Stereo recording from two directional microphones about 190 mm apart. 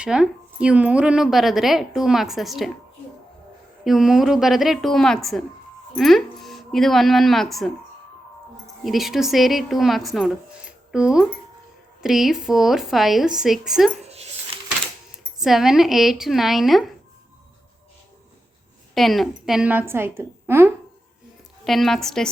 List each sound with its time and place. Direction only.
0.0 s a woman's voice: 5° right (ahead or behind)
3.8 s a woman's voice: centre (ahead or behind)
8.8 s a woman's voice: centre (ahead or behind)
14.1 s dog: 35° right (ahead or behind)
15.4 s a woman's voice: centre (ahead or behind)
18.9 s a woman's voice: centre (ahead or behind)
21.6 s a woman's voice: centre (ahead or behind)